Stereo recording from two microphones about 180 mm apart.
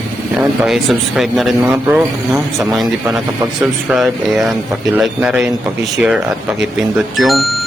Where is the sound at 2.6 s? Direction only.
Centre (ahead or behind).